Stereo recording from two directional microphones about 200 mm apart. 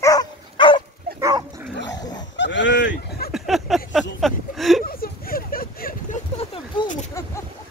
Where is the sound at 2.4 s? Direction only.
60° left (ahead or behind).